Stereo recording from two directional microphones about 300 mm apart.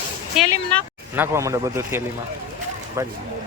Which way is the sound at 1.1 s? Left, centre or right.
Centre.